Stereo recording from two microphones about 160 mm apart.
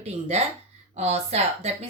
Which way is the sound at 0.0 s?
45° right (ahead or behind).